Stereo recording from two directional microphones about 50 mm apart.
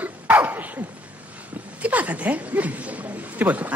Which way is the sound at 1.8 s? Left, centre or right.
Right.